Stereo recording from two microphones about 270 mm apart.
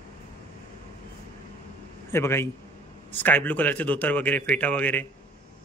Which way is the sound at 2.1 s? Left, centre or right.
Centre.